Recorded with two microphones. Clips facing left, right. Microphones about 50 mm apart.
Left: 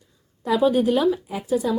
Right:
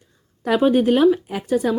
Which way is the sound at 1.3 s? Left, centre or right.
Right.